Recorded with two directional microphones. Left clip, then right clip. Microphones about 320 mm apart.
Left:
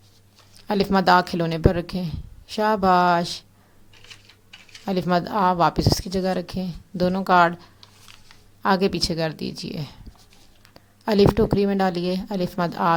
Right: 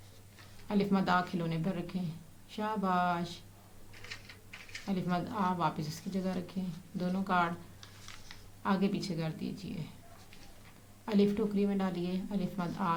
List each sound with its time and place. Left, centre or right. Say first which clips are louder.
0.7 s speech: left 13 dB; left
4.9 s speech: left 14 dB; left
8.6 s speech: left 13 dB; left
11.0 s speech: left 13 dB; left